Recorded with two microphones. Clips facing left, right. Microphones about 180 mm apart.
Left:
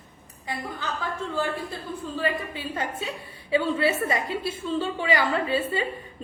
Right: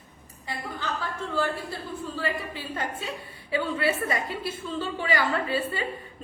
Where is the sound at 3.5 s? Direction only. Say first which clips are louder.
Left 3 dB; 25° left (ahead or behind).